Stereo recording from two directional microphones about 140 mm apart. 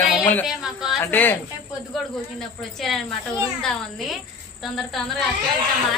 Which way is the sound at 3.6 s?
Centre (ahead or behind).